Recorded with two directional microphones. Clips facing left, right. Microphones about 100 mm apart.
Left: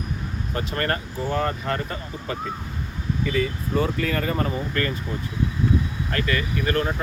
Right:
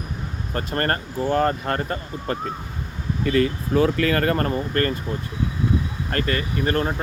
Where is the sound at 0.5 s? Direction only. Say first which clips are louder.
Right 2 dB; 45° right (ahead or behind).